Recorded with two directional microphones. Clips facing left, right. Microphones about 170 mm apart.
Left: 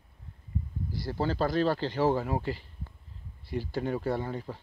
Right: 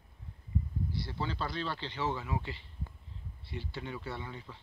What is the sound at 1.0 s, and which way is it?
Speech, 45° left (ahead or behind).